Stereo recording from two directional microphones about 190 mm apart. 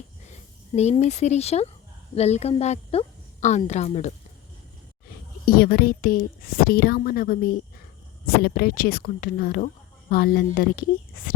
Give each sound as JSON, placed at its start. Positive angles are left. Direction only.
{"t": 0.8, "sound": "speech", "side_deg": 35}
{"t": 5.5, "sound": "a woman's voice", "side_deg": 50}